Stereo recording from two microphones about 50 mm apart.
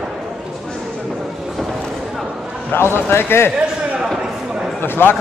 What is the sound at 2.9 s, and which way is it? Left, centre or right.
Speech, left.